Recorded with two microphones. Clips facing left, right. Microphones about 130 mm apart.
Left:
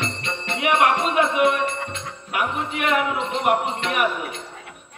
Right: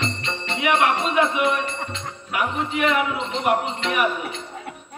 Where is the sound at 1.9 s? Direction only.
50° left (ahead or behind).